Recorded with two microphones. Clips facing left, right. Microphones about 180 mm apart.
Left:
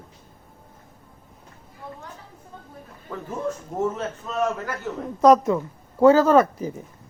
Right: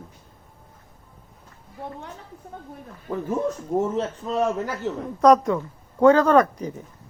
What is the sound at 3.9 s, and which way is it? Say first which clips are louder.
Speech: right 4 dB; 30° right (ahead or behind).